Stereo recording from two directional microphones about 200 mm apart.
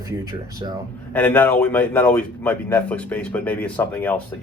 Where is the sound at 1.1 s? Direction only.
10° left (ahead or behind).